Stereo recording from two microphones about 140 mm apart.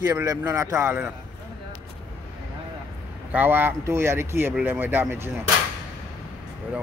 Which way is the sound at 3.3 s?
15° right (ahead or behind).